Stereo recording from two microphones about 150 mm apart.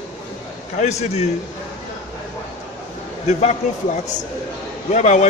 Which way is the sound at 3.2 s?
50° left (ahead or behind).